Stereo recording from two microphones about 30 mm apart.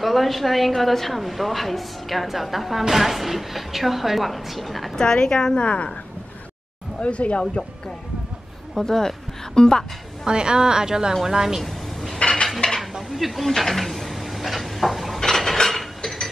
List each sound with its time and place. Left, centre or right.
0.0 s a woman's voice: centre
4.9 s a woman's voice: left
7.0 s speech: left
8.7 s a woman's voice: centre
10.2 s a woman's voice: right
11.6 s a sound: centre
12.6 s dishes: left
13.1 s speech: centre
13.6 s a sound: centre
15.1 s mechanisms: centre